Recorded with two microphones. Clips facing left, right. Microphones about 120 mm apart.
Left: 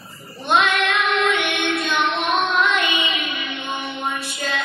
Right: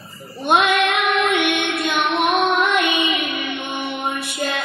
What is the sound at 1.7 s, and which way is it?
Child singing, 65° right (ahead or behind).